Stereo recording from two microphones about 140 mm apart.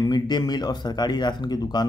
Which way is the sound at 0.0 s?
30° left (ahead or behind).